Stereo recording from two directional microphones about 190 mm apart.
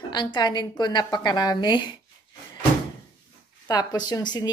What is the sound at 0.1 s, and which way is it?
A woman's voice, 25° left (ahead or behind).